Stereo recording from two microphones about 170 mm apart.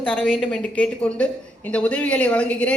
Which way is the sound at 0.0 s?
5° left (ahead or behind).